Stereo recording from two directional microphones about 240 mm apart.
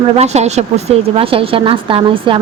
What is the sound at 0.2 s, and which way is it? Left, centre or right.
A woman's voice, right.